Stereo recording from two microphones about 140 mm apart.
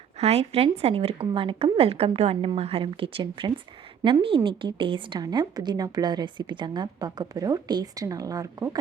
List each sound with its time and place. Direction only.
0.2 s a woman's voice: 50° right (ahead or behind); by 8.8 s 25° right (ahead or behind)